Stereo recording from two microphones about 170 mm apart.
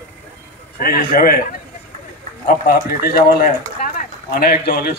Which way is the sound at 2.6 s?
55° left (ahead or behind).